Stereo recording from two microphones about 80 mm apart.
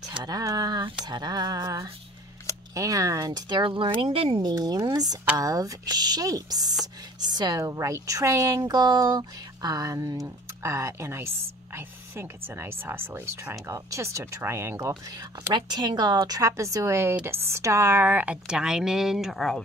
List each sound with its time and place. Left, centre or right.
0.1 s speech: right
7.6 s speech: right
13.7 s speech: right
15.5 s speech: right
16.4 s speech: right; by 19.6 s centre